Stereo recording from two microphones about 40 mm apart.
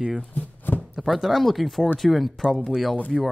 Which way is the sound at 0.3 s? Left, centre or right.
Left.